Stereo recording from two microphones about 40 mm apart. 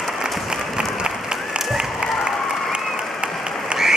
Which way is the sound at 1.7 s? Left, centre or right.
Centre.